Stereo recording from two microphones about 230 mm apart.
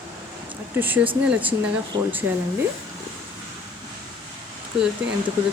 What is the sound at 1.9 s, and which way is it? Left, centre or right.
Speech, centre.